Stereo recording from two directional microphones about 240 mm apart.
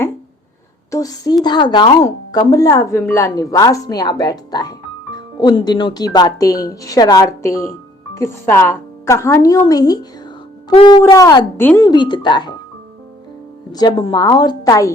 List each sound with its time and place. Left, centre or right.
0.9 s a woman's voice: centre
13.7 s a woman's voice: centre